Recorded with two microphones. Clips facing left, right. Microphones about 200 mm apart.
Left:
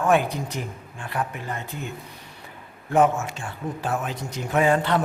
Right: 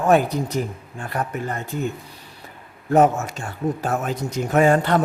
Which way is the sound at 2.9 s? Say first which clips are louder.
Right 3 dB; 40° right (ahead or behind).